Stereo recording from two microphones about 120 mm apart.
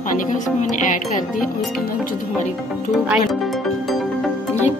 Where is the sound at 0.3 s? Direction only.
90° left.